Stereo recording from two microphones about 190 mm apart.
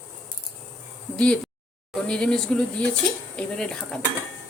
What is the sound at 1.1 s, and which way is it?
Speech, 5° left (ahead or behind).